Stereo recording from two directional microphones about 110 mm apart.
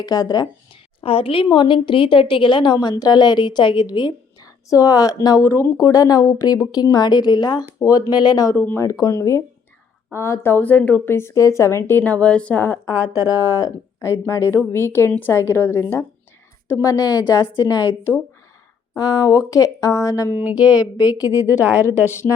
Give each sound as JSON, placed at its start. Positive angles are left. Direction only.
{"t": 0.0, "sound": "a woman's voice", "side_deg": 35}
{"t": 1.0, "sound": "a woman's voice", "side_deg": 55}
{"t": 2.7, "sound": "a woman's voice", "side_deg": 35}
{"t": 8.5, "sound": "speech", "side_deg": 15}
{"t": 8.8, "sound": "a woman's voice", "side_deg": 30}
{"t": 20.3, "sound": "speech", "side_deg": -15}
{"t": 20.7, "sound": "a woman's voice", "side_deg": 35}